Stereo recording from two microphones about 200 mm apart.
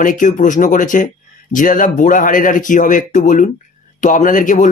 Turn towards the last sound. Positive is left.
turn(degrees=40)  # may be behind; listen again after turning